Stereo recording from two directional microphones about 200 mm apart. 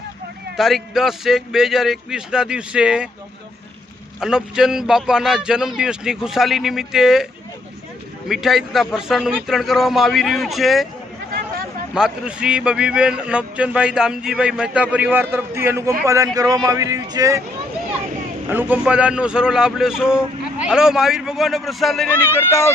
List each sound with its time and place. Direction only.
0.5 s a man's voice: centre (ahead or behind)
4.2 s a man's voice: 5° right (ahead or behind)
8.3 s a man's voice: centre (ahead or behind)
11.9 s a man's voice: 5° right (ahead or behind)
18.4 s a man's voice: 10° right (ahead or behind)
22.4 s speech: 15° left (ahead or behind)